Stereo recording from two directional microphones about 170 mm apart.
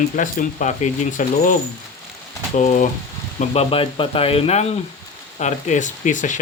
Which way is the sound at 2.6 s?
45° left (ahead or behind).